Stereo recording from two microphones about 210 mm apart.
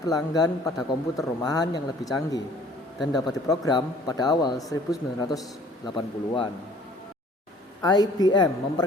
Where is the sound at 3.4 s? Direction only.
15° left (ahead or behind).